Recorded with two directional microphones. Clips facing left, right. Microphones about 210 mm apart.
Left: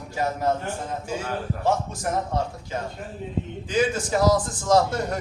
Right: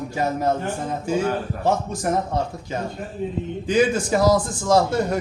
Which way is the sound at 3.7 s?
15° right (ahead or behind).